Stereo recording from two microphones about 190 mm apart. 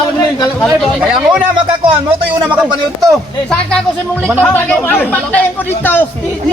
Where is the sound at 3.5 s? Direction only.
5° left (ahead or behind).